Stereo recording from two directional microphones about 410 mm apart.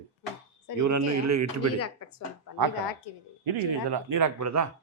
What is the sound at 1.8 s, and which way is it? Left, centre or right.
Speech, left.